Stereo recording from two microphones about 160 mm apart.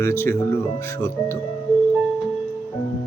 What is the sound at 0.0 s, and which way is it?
Speech, 15° left (ahead or behind).